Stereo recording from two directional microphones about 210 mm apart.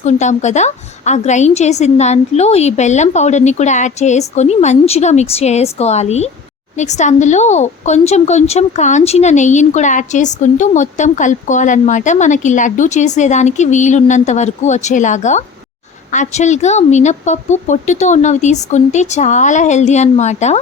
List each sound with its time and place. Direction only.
0.0 s speech: 35° left (ahead or behind)